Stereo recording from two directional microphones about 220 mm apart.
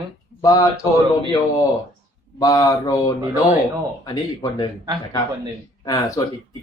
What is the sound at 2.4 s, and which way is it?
Speech, 15° left (ahead or behind).